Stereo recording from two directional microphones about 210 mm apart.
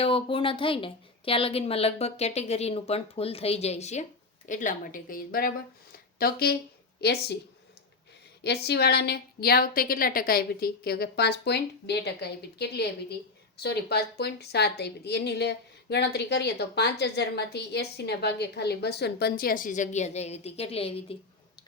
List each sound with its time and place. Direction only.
0.0 s a woman's voice: 25° left (ahead or behind); by 7.3 s 50° left (ahead or behind)
8.4 s a woman's voice: 50° left (ahead or behind); by 21.2 s 30° left (ahead or behind)